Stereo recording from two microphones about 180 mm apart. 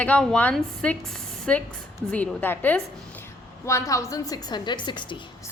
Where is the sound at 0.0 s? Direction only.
5° left (ahead or behind); by 5.2 s 25° left (ahead or behind).